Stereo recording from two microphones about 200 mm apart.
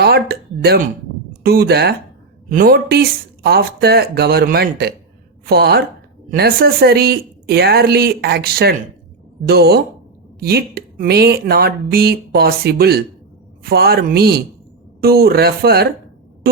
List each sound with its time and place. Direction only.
0.0 s speech: 50° right (ahead or behind)